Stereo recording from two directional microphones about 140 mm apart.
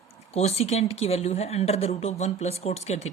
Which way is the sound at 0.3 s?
50° left (ahead or behind).